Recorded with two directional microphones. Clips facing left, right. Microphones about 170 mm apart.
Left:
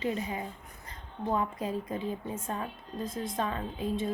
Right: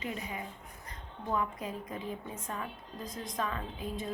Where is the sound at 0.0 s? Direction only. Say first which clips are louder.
Left 6 dB; 30° left (ahead or behind).